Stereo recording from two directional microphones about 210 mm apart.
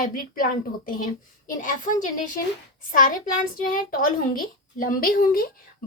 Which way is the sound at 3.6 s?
40° left (ahead or behind).